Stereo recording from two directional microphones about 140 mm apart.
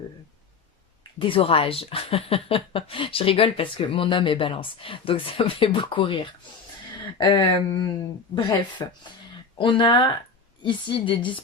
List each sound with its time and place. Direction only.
1.2 s speech: 40° left (ahead or behind)
8.8 s speech: 25° left (ahead or behind)